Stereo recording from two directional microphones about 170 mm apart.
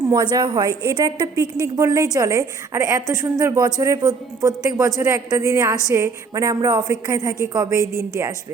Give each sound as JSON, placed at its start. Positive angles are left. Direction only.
{"t": 0.1, "sound": "a woman's voice", "side_deg": -25}